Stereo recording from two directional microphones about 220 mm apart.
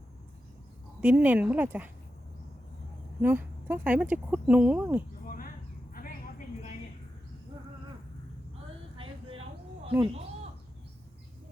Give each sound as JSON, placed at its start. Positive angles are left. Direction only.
{"t": 1.0, "sound": "speech", "side_deg": -10}
{"t": 3.2, "sound": "speech", "side_deg": -10}
{"t": 5.2, "sound": "a sound", "side_deg": 40}
{"t": 9.0, "sound": "vehicle", "side_deg": -25}